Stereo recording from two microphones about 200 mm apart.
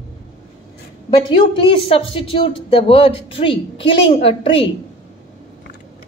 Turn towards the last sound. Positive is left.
turn(degrees=25)  # may be behind; listen again after turning